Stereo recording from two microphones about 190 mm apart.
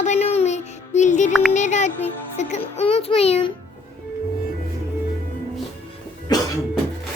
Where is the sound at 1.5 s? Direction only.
40° left (ahead or behind).